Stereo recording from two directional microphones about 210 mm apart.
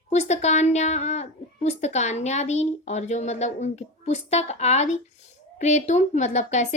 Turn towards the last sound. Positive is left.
turn(degrees=35)  # may be behind; listen again after turning